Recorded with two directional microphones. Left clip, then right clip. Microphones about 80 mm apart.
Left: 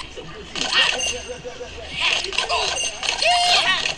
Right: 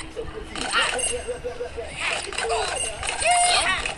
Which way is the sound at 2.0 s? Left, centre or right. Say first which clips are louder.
Left 6 dB; centre.